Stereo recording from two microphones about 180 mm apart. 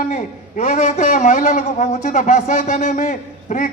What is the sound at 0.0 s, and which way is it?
A man's voice, 45° left (ahead or behind).